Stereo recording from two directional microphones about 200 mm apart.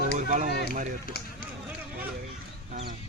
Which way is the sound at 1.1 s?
55° left (ahead or behind).